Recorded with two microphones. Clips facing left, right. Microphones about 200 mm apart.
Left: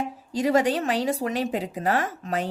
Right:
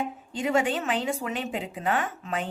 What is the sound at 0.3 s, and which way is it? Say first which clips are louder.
A woman's voice: left 4 dB; 40° left (ahead or behind).